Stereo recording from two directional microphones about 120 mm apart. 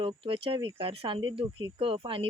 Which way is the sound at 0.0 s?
45° right (ahead or behind).